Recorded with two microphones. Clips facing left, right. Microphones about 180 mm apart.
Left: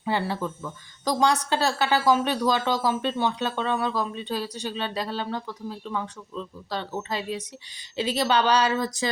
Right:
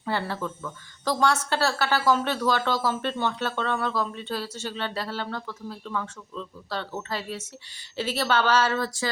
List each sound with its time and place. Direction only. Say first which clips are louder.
0.0 s speech: left 2 dB; 15° left (ahead or behind)